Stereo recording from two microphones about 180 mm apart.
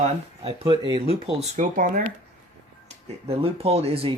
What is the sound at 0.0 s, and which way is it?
Speech, 30° right (ahead or behind).